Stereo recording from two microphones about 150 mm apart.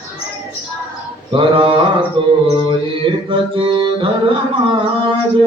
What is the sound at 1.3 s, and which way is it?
Carnatic music, 35° right (ahead or behind).